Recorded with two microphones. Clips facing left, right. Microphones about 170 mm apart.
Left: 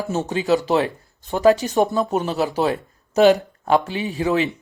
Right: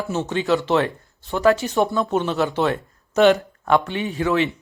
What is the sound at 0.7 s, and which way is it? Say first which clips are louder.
Speech: even; 20° left (ahead or behind).